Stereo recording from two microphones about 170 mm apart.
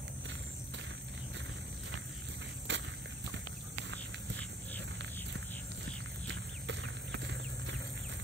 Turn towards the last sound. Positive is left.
turn(degrees=-90)